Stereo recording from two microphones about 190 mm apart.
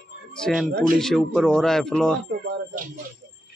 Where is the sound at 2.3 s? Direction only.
55° right (ahead or behind).